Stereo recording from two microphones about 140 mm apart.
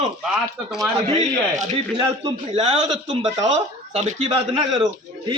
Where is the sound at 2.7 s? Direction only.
40° right (ahead or behind).